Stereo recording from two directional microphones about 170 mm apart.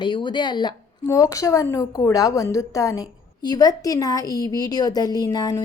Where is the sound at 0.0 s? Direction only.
30° left (ahead or behind).